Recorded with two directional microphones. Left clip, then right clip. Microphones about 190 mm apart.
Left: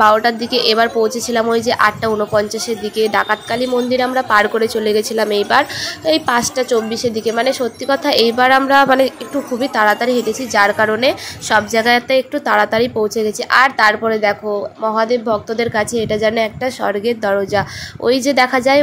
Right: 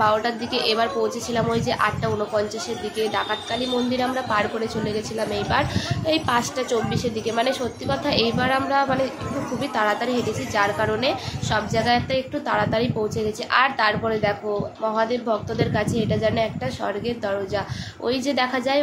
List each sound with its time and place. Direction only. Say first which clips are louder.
0.0 s a woman's voice: left 9 dB; 35° left (ahead or behind)